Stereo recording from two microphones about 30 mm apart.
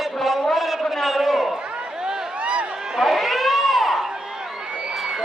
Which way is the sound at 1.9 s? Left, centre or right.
Right.